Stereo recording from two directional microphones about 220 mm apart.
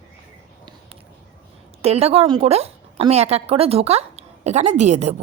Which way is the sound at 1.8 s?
30° right (ahead or behind).